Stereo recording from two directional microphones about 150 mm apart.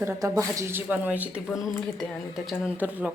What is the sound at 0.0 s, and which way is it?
Speech, 20° right (ahead or behind).